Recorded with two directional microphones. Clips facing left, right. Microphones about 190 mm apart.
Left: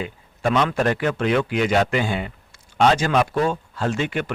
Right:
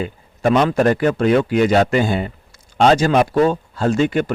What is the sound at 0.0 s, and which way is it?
Speech, 40° right (ahead or behind).